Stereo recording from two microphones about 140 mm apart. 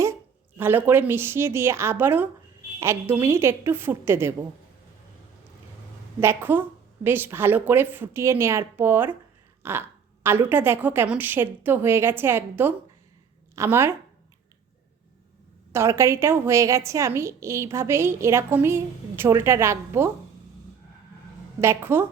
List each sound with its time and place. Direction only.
0.0 s a woman's voice: 15° right (ahead or behind)
6.1 s a woman's voice: 15° right (ahead or behind)
15.7 s a woman's voice: 20° right (ahead or behind)
21.6 s a woman's voice: 15° right (ahead or behind)